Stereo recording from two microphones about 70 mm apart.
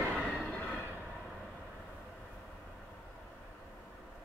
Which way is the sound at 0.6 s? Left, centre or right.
Left.